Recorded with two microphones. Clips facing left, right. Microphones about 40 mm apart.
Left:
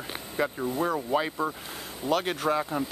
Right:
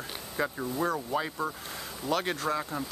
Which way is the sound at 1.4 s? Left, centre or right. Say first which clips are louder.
Left 3 dB; left.